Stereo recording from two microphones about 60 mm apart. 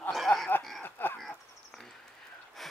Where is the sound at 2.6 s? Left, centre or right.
Centre.